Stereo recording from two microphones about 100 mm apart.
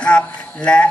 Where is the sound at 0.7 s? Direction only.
10° left (ahead or behind).